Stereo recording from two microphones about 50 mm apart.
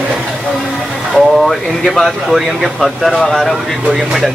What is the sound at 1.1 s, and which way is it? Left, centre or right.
Speech, centre.